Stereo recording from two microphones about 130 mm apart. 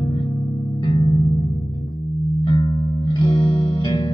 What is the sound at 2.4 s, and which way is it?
Music, 35° left (ahead or behind).